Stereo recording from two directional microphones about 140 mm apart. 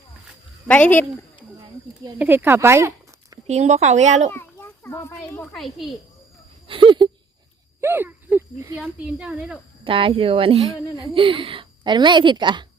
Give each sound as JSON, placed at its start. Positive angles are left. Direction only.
{"t": 0.7, "sound": "speech", "side_deg": 10}
{"t": 2.1, "sound": "speech", "side_deg": -15}
{"t": 3.4, "sound": "speech", "side_deg": -50}
{"t": 4.3, "sound": "children playing", "side_deg": 15}
{"t": 5.5, "sound": "a child's voice", "side_deg": 0}
{"t": 6.7, "sound": "a woman's voice", "side_deg": -35}
{"t": 7.8, "sound": "speech", "side_deg": -15}
{"t": 9.0, "sound": "a woman's voice", "side_deg": -5}
{"t": 9.8, "sound": "a woman's voice", "side_deg": -40}